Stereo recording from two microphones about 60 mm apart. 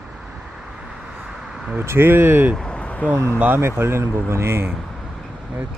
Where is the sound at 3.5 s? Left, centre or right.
Right.